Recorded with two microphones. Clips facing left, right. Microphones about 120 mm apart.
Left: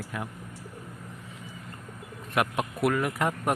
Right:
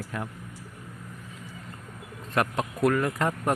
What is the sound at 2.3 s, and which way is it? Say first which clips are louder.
Speech: right 1 dB; 10° left (ahead or behind).